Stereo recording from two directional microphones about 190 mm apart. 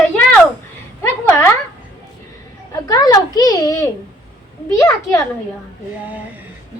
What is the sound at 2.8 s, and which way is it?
A woman's voice, 20° left (ahead or behind).